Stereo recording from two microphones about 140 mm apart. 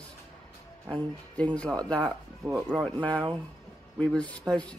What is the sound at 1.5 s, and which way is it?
Speech, 10° left (ahead or behind).